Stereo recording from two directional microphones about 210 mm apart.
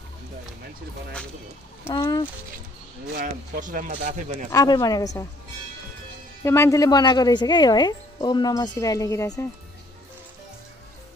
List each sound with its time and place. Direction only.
1.9 s speech: 20° left (ahead or behind)
3.2 s speech: 40° right (ahead or behind)
4.5 s speech: 20° left (ahead or behind)
6.4 s speech: 15° left (ahead or behind)